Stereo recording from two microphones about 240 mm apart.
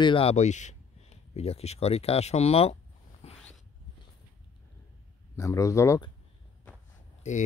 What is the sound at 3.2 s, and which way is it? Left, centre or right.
Zipper, left.